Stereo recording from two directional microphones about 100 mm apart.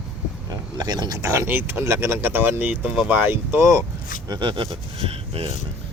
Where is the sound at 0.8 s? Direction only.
40° right (ahead or behind).